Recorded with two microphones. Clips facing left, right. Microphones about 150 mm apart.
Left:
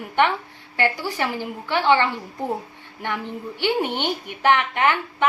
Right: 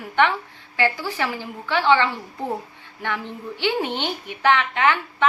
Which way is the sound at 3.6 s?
15° left (ahead or behind).